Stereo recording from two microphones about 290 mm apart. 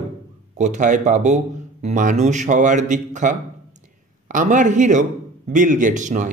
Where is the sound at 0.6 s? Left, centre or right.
Right.